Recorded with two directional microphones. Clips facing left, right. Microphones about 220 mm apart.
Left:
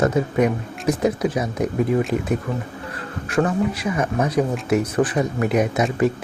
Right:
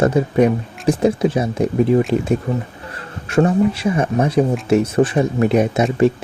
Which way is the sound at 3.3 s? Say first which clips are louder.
Right 5 dB; 25° right (ahead or behind).